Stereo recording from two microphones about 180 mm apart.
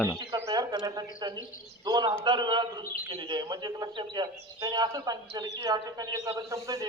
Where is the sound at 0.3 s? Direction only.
20° right (ahead or behind).